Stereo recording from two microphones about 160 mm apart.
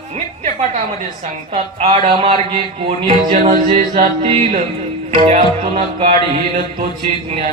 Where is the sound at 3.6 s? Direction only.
35° right (ahead or behind).